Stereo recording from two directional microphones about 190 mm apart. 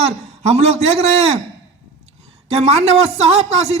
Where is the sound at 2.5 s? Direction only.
35° right (ahead or behind).